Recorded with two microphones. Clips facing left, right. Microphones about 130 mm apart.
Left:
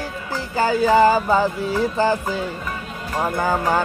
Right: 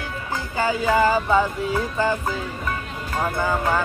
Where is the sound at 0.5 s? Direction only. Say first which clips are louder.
Left 4 dB; 35° left (ahead or behind).